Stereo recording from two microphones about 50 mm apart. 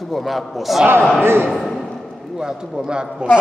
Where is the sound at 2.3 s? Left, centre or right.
Centre.